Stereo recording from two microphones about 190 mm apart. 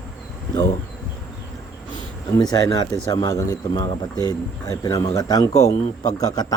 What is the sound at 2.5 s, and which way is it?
Speech, 20° left (ahead or behind).